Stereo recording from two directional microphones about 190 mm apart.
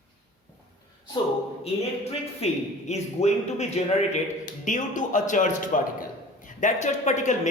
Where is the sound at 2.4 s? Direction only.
35° left (ahead or behind).